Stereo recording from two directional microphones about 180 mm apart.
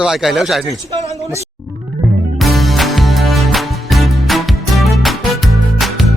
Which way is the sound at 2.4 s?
Centre (ahead or behind).